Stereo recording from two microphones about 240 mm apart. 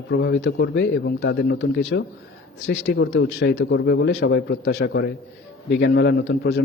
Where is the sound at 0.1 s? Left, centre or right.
Left.